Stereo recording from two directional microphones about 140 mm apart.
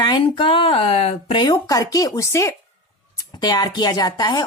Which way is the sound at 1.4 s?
25° left (ahead or behind).